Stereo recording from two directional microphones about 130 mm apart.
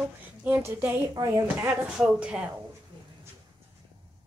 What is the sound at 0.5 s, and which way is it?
A woman's voice, 20° right (ahead or behind).